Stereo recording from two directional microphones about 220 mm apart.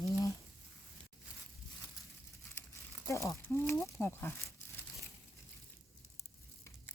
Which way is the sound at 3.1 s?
15° left (ahead or behind).